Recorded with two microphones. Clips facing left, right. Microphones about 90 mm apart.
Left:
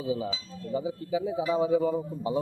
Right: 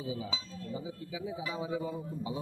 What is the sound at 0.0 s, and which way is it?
A man's voice, 70° left (ahead or behind).